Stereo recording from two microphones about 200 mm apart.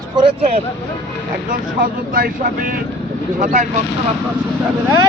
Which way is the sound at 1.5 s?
45° right (ahead or behind).